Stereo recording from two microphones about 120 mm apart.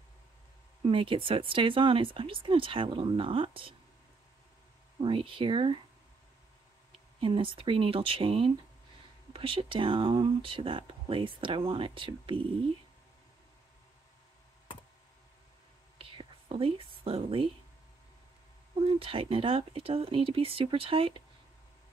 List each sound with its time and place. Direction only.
0.8 s speech: 45° right (ahead or behind)
5.0 s speech: 45° right (ahead or behind)
7.2 s speech: 45° right (ahead or behind)
16.0 s whispering: 50° right (ahead or behind)
18.9 s speech: 50° right (ahead or behind)